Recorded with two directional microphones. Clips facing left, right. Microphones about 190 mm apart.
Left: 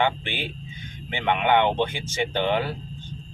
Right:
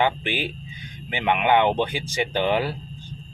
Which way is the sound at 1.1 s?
10° right (ahead or behind).